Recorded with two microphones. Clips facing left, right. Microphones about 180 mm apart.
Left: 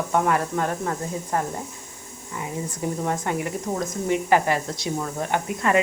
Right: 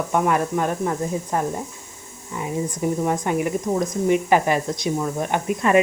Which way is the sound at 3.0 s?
15° right (ahead or behind).